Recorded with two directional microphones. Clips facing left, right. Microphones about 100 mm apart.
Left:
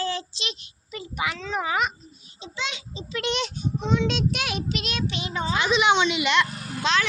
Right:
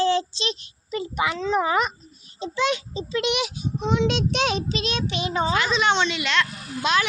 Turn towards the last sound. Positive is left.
turn(degrees=-10)  # may be behind; listen again after turning